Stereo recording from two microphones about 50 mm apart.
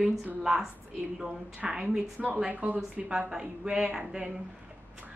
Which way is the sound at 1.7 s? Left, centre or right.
Centre.